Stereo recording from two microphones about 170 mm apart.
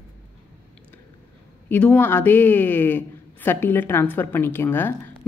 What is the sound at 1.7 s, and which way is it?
Speech, 10° left (ahead or behind).